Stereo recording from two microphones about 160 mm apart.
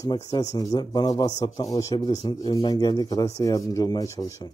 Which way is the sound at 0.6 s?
25° left (ahead or behind).